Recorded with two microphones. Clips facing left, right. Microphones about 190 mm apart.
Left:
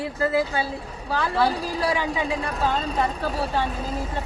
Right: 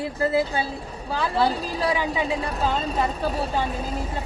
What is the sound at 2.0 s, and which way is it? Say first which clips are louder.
Speech: right 1 dB; 20° right (ahead or behind).